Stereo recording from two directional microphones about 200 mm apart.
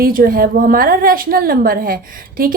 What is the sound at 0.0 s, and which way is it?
A woman's voice, 45° right (ahead or behind).